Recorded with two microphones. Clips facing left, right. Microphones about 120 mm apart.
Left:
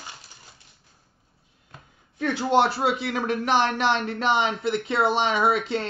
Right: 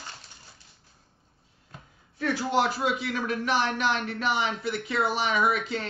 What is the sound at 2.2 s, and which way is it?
Speech, 25° left (ahead or behind).